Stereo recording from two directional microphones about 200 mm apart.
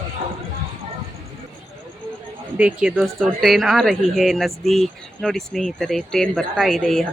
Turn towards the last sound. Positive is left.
turn(degrees=0)  # may be behind; listen again after turning